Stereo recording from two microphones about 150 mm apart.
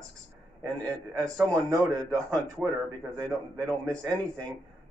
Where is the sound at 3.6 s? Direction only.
5° left (ahead or behind).